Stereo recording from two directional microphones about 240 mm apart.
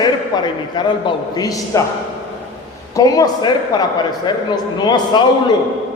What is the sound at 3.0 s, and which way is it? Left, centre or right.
A man's voice, centre.